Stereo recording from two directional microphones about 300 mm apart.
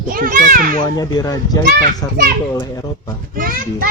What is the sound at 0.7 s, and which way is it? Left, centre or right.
Speech, centre.